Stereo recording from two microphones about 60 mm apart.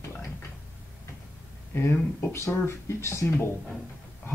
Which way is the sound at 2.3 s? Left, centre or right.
Left.